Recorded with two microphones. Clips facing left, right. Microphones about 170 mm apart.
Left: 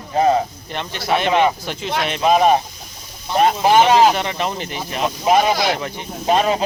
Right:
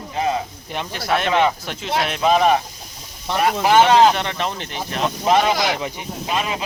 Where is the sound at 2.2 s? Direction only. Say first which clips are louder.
Left 2 dB; 15° left (ahead or behind).